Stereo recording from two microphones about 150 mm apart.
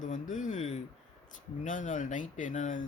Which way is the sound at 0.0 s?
55° left (ahead or behind).